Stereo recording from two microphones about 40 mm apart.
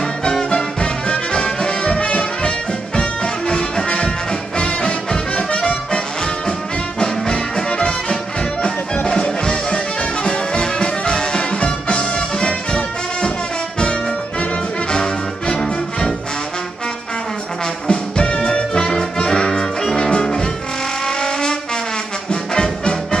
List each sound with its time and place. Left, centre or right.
0.2 s music: left
7.0 s music: left
14.9 s brass instrument: centre
17.8 s music: left
21.2 s trombone: centre
22.3 s brass instrument: left